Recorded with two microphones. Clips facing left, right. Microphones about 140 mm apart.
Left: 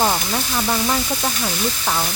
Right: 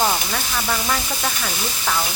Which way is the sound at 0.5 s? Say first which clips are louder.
Left 3 dB; 20° left (ahead or behind).